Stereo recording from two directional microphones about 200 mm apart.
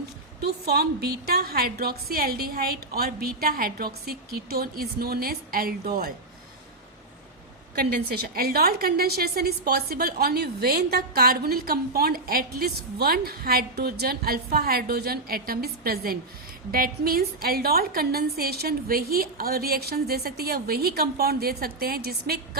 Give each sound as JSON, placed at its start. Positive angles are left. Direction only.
{"t": 0.4, "sound": "a woman's voice", "side_deg": -50}
{"t": 7.8, "sound": "a woman's voice", "side_deg": -50}